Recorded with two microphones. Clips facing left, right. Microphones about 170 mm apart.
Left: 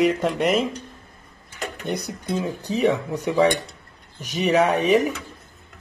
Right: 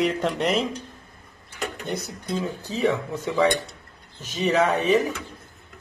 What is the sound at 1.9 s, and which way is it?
Speech, 15° left (ahead or behind).